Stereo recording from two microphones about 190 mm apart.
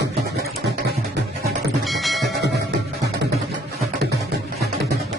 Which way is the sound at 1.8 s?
Centre (ahead or behind).